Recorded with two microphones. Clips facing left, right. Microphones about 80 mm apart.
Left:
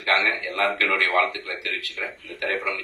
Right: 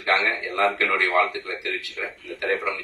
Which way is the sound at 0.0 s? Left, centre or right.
Right.